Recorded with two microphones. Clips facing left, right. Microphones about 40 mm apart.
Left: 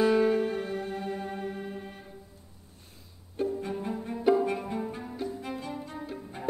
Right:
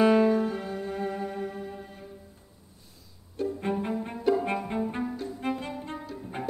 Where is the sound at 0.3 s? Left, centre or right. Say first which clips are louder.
Right 1 dB; left.